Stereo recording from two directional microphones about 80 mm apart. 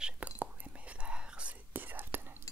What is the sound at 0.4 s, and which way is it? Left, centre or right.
Whispering, centre.